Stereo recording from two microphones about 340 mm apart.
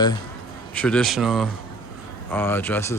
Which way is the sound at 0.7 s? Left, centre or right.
Centre.